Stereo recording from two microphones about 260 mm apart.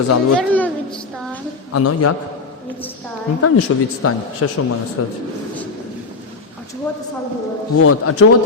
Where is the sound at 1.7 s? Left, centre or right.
Left.